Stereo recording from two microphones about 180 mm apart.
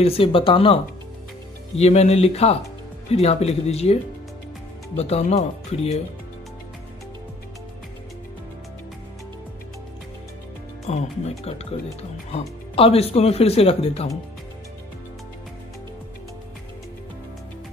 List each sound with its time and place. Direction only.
0.0 s speech: 30° left (ahead or behind)
1.8 s speech: 35° left (ahead or behind)
10.9 s speech: 35° left (ahead or behind)